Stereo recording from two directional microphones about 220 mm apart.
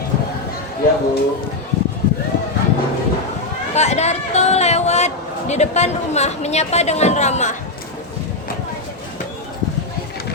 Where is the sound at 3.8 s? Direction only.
30° left (ahead or behind).